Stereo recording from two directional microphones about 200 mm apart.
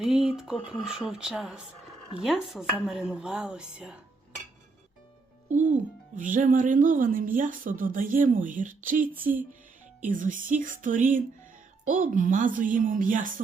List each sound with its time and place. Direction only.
0.0 s dishes: centre (ahead or behind)
5.5 s music: 35° right (ahead or behind)
6.1 s a woman's voice: 40° right (ahead or behind)